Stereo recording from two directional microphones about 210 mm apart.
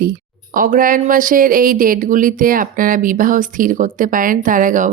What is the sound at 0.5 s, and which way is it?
Speech, 40° right (ahead or behind).